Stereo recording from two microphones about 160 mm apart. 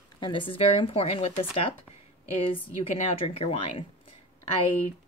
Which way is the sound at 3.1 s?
35° left (ahead or behind).